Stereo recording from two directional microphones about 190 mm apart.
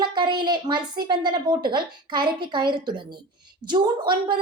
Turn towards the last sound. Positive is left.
turn(degrees=-25)  # may be behind; listen again after turning